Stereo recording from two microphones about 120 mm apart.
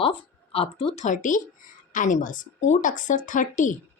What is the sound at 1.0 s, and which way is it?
A woman's voice, 90° left.